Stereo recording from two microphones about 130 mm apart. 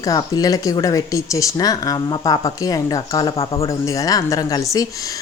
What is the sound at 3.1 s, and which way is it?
Speech, 45° left (ahead or behind).